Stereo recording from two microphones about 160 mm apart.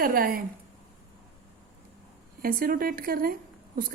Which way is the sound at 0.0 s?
65° right (ahead or behind).